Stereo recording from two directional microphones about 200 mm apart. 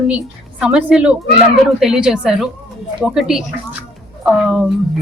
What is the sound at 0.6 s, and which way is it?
A woman's voice, 5° right (ahead or behind).